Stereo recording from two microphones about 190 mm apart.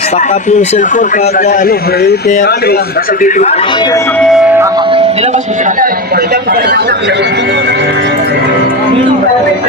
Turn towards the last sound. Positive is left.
turn(degrees=-65)  # may be behind; listen again after turning